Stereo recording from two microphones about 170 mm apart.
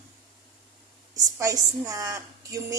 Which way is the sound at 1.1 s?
20° right (ahead or behind).